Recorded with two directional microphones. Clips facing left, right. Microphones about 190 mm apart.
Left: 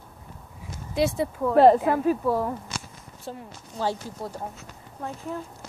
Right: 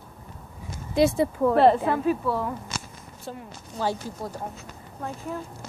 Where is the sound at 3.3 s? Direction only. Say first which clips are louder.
Even; 25° left (ahead or behind).